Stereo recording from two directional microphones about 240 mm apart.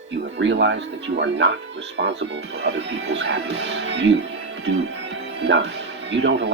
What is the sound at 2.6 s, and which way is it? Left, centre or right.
Speech, right.